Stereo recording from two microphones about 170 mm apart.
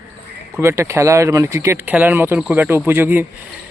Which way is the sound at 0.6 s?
15° right (ahead or behind).